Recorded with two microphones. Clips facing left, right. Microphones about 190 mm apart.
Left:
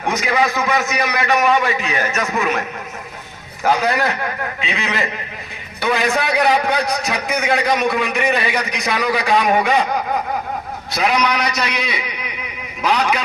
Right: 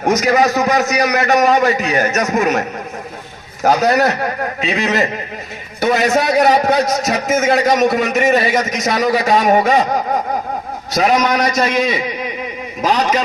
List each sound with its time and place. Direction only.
0.0 s a man's voice: 40° right (ahead or behind)